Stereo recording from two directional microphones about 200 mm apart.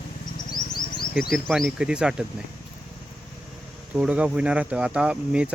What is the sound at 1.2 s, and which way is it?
Speech, centre (ahead or behind).